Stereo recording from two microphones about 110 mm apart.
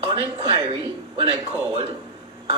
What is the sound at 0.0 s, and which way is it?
A man's voice, 45° right (ahead or behind).